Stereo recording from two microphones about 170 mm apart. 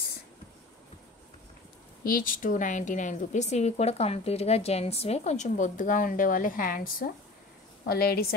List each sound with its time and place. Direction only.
2.0 s a woman's voice: 55° left (ahead or behind)
7.8 s a woman's voice: 65° left (ahead or behind)